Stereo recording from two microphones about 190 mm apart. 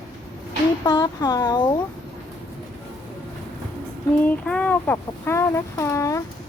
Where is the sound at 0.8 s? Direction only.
20° left (ahead or behind).